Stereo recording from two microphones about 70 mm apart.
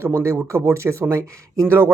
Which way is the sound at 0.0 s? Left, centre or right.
Right.